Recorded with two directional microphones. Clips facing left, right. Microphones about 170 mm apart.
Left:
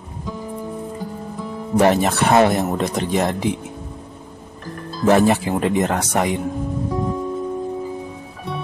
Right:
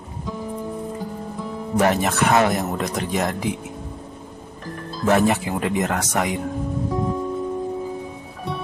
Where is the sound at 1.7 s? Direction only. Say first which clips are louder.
Left 3 dB; 30° left (ahead or behind).